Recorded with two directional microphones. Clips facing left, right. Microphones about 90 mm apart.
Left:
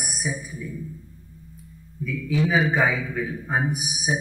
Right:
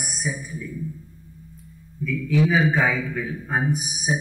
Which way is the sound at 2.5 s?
5° left (ahead or behind).